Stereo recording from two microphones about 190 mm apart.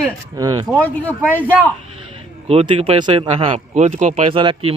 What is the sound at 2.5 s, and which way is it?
Speech, 30° right (ahead or behind).